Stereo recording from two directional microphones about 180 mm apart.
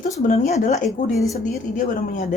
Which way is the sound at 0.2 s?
45° left (ahead or behind).